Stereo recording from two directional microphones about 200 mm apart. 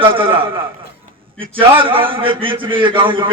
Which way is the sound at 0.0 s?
25° right (ahead or behind).